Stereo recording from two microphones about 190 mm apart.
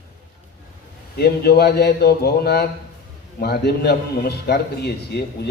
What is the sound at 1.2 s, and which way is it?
A man's voice, 55° left (ahead or behind).